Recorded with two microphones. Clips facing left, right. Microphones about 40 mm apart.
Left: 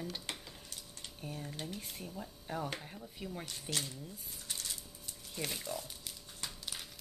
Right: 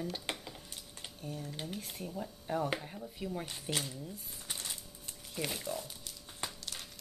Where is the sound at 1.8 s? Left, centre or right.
Centre.